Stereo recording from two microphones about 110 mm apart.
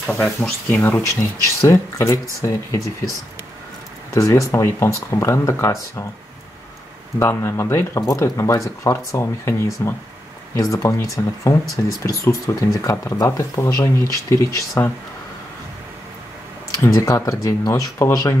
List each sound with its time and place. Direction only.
0.2 s speech: 20° left (ahead or behind)
4.1 s speech: 30° left (ahead or behind)
7.2 s speech: 25° left (ahead or behind)
16.8 s speech: 30° left (ahead or behind)